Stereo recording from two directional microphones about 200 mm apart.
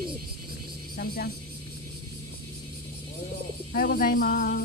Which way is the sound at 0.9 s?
55° left (ahead or behind).